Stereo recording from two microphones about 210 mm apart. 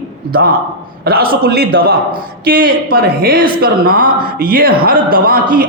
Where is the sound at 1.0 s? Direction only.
45° right (ahead or behind).